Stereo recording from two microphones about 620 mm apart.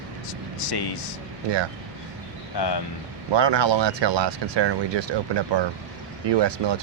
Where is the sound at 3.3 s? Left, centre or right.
Right.